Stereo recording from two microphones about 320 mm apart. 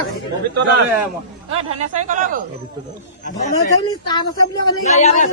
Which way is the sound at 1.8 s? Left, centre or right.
Right.